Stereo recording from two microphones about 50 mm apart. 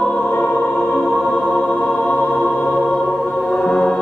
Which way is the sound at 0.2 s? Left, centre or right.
Left.